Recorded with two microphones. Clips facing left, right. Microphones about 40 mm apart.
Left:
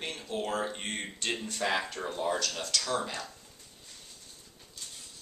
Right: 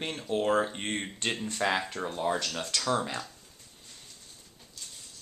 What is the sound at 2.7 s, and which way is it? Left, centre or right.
Speech, right.